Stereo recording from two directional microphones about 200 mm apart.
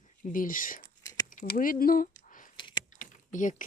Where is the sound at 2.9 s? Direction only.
40° left (ahead or behind).